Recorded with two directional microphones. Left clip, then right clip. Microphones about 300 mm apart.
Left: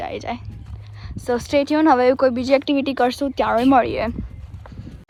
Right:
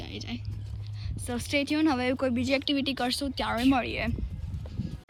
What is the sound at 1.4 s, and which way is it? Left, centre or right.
Speech, centre.